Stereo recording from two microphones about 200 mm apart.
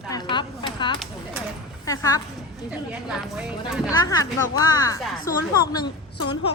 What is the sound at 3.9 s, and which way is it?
Speech, 15° left (ahead or behind).